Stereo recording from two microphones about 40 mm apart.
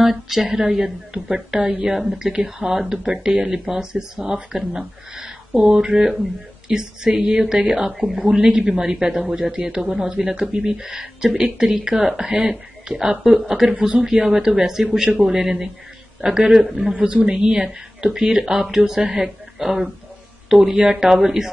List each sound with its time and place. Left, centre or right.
0.0 s a woman's voice: centre
1.6 s a woman's voice: right
1.9 s a woman's voice: centre; by 10.8 s right
10.8 s speech: centre
13.7 s a man's voice: right
14.3 s speech: centre
16.9 s a woman's voice: right; by 21.5 s centre